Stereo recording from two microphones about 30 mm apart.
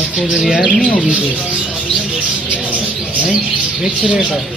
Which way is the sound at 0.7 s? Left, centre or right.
Left.